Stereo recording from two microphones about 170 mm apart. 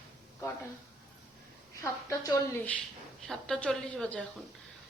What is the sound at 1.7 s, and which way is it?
Speech, 20° left (ahead or behind).